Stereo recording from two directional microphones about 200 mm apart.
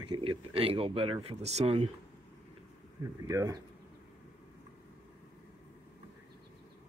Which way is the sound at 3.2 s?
15° right (ahead or behind).